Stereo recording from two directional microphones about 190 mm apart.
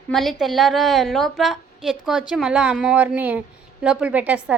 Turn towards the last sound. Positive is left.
turn(degrees=-5)  # may be behind; listen again after turning